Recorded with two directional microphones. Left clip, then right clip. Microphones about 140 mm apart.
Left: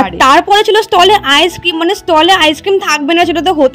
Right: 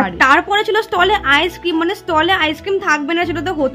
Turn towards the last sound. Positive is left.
turn(degrees=35)  # may be behind; listen again after turning